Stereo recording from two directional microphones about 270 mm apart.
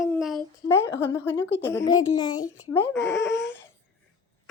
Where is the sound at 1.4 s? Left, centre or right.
Left.